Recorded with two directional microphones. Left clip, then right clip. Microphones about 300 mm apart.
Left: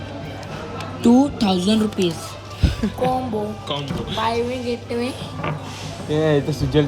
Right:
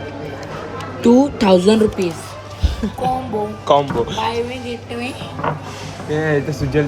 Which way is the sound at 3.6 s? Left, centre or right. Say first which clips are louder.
Right 12 dB; centre.